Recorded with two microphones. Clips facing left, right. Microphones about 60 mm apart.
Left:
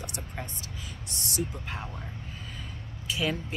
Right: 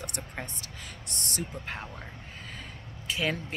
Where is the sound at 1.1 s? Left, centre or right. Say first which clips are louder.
Left 3 dB; right.